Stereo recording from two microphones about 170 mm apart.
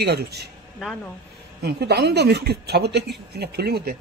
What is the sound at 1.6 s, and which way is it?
Speech, 75° right (ahead or behind).